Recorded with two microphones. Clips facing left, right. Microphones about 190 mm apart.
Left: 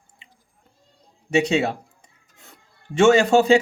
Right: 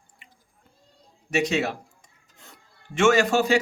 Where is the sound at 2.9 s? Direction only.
30° left (ahead or behind).